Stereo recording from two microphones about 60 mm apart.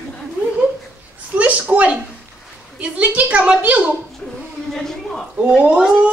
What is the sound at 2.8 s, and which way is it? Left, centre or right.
A woman's voice, right.